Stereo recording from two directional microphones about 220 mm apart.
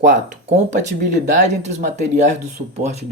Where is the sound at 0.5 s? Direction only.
35° right (ahead or behind).